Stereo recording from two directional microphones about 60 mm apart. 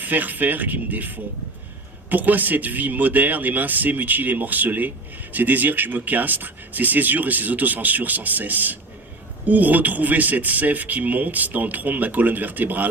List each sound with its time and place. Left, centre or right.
0.0 s speech: right